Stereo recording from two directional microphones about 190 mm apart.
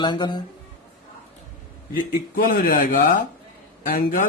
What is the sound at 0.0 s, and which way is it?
Speech, 25° left (ahead or behind).